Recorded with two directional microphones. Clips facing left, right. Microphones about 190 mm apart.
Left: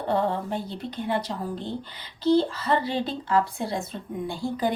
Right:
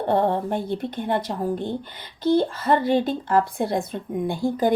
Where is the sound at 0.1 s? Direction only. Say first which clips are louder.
Right 4 dB; 55° right (ahead or behind).